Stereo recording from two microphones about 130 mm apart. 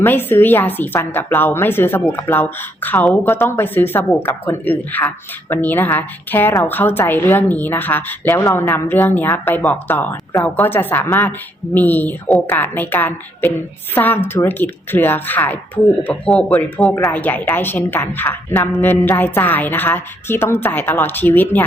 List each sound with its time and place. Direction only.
0.0 s a woman's voice: 15° left (ahead or behind)